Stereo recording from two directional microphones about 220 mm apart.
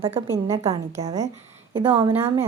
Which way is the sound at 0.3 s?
15° right (ahead or behind).